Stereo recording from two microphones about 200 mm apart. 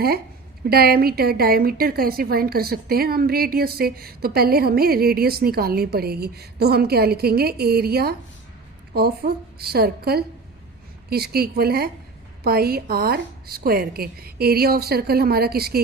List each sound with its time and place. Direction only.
0.6 s a woman's voice: 50° right (ahead or behind)